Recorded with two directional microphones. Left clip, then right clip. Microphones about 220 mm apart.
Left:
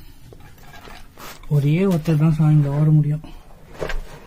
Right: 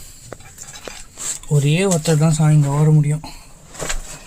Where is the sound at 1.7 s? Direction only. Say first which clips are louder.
Right 3 dB; 35° right (ahead or behind).